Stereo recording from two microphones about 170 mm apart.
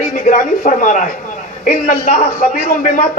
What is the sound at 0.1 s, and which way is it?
A man's voice, 50° left (ahead or behind).